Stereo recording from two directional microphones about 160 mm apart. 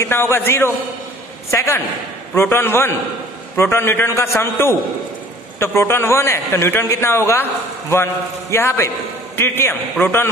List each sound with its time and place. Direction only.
0.0 s a man's voice: 15° left (ahead or behind)